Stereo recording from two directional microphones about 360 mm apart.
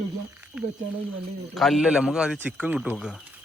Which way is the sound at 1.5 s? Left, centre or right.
Centre.